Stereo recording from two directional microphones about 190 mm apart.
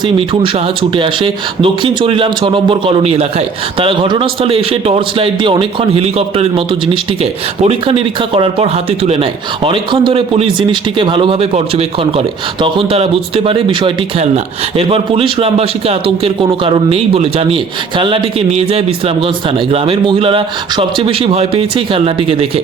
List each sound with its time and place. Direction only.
0.2 s speech: 25° right (ahead or behind)